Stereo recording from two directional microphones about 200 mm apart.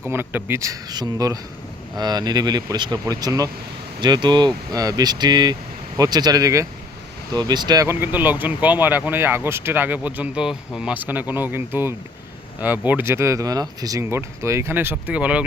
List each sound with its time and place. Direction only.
0.1 s speech: 10° right (ahead or behind)